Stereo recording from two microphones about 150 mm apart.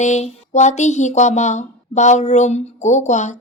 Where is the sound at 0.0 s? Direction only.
50° left (ahead or behind).